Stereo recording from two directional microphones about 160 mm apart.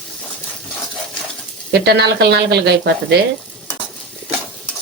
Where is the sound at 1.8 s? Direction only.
90° right.